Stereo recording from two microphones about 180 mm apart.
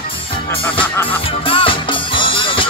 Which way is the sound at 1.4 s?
30° left (ahead or behind).